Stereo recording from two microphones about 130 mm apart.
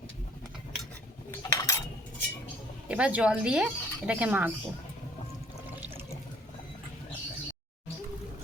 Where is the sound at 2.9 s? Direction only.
10° right (ahead or behind).